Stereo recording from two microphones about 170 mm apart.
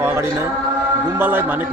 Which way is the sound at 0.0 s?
15° right (ahead or behind).